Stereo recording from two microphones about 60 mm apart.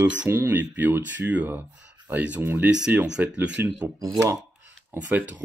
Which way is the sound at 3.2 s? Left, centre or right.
Right.